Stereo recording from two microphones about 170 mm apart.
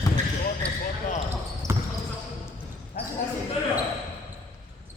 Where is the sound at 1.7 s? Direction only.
15° right (ahead or behind).